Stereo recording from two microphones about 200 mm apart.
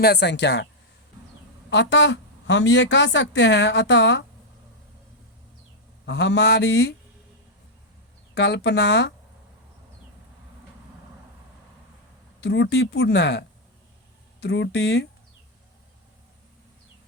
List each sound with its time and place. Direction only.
0.0 s a woman's voice: 55° left (ahead or behind)
1.7 s a woman's voice: 65° left (ahead or behind)
6.1 s a woman's voice: 60° left (ahead or behind)
8.4 s a woman's voice: 60° left (ahead or behind)
12.4 s a woman's voice: 60° left (ahead or behind)
14.4 s a woman's voice: 60° left (ahead or behind)